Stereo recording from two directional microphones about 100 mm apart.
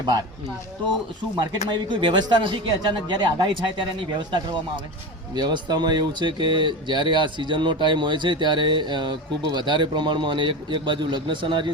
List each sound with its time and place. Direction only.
1.6 s speech: 50° right (ahead or behind)
5.3 s speech: 50° right (ahead or behind)